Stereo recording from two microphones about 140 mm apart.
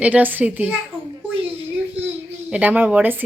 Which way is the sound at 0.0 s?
10° right (ahead or behind).